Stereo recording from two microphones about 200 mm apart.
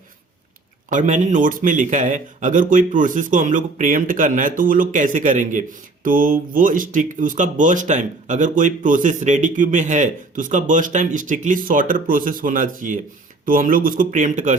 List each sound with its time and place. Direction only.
0.9 s a man's voice: 40° right (ahead or behind)